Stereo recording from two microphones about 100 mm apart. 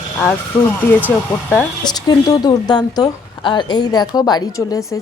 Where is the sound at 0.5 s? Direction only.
5° left (ahead or behind).